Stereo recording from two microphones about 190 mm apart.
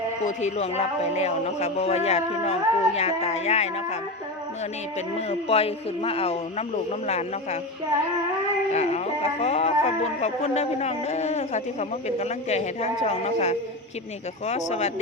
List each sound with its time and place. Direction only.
0.3 s speech: 35° left (ahead or behind)
5.1 s speech: 30° left (ahead or behind)
8.7 s speech: 35° left (ahead or behind)